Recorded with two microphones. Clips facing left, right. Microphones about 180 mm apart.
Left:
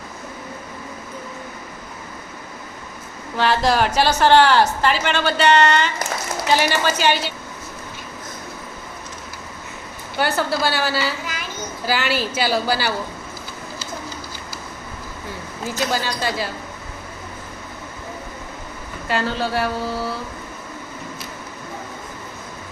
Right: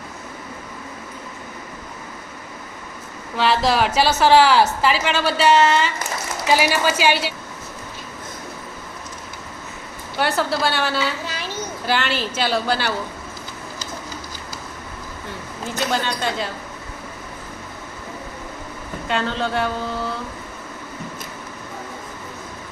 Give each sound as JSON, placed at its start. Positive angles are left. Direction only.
{"t": 3.3, "sound": "a woman's voice", "side_deg": 0}
{"t": 10.2, "sound": "a woman's voice", "side_deg": 0}
{"t": 11.3, "sound": "children playing", "side_deg": -35}
{"t": 11.9, "sound": "a woman's voice", "side_deg": 5}
{"t": 15.9, "sound": "a woman's voice", "side_deg": 5}
{"t": 19.0, "sound": "a woman's voice", "side_deg": 5}